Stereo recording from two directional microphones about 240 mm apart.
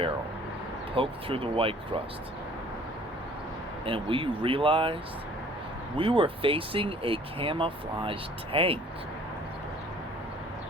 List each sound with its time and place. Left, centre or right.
0.9 s speech: right
3.8 s speech: right
6.0 s speech: right